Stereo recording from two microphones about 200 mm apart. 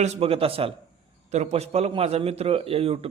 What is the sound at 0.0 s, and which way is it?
A man's voice, 30° right (ahead or behind).